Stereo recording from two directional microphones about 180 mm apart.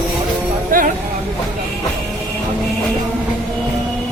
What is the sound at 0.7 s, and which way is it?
Music, 50° right (ahead or behind).